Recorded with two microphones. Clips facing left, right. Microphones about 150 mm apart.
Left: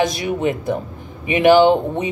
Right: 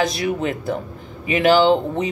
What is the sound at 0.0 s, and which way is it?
Speech, 20° left (ahead or behind).